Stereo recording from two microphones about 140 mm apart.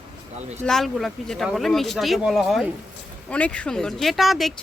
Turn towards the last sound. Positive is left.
turn(degrees=0)  # may be behind; listen again after turning